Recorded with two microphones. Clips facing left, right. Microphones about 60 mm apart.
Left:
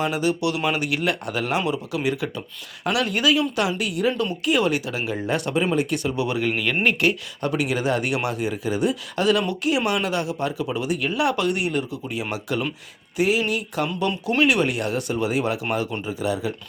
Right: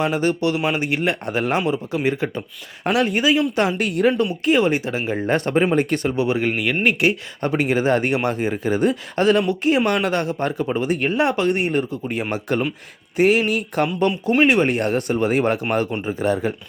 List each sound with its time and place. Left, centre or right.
0.0 s speech: right
3.5 s speech: right
4.4 s speech: right
6.5 s speech: centre
7.4 s speech: right
14.3 s speech: right